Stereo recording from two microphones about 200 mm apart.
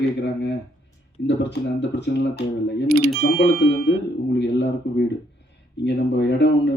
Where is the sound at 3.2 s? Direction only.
65° left (ahead or behind).